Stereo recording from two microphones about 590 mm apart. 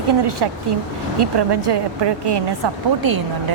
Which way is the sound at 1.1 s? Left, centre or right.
Right.